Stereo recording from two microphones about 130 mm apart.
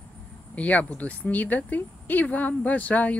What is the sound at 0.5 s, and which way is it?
Speech, 10° left (ahead or behind).